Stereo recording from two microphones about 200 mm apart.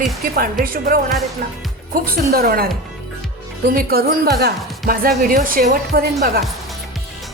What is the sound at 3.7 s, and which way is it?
A woman's voice, 50° right (ahead or behind).